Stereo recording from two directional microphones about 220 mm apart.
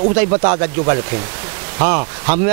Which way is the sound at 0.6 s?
15° right (ahead or behind).